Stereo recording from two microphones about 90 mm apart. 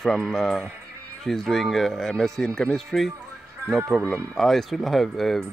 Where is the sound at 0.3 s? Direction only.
5° left (ahead or behind).